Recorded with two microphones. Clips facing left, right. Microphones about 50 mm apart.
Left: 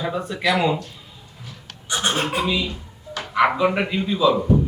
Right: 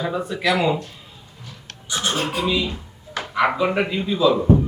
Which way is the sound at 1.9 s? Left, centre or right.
Left.